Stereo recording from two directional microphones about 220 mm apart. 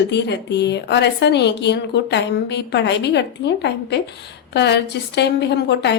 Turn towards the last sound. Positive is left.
turn(degrees=50)  # may be behind; listen again after turning